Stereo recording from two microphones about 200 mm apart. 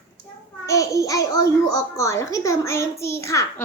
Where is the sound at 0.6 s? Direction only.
15° left (ahead or behind).